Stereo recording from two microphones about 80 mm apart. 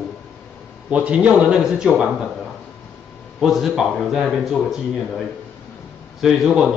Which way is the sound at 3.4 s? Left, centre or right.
Centre.